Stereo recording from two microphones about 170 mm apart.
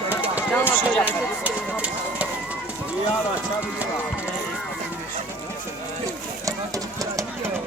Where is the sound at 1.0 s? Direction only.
10° right (ahead or behind).